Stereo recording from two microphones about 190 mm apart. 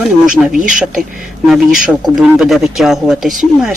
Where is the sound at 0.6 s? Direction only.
45° right (ahead or behind).